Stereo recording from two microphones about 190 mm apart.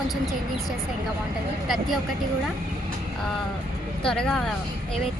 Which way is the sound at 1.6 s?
Centre (ahead or behind).